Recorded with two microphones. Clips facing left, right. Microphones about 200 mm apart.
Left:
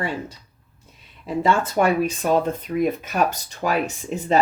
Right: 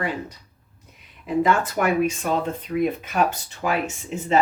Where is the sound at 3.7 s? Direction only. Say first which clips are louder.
Left 2 dB; 35° left (ahead or behind).